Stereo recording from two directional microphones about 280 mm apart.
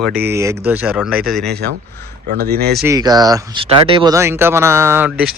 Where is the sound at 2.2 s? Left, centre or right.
Right.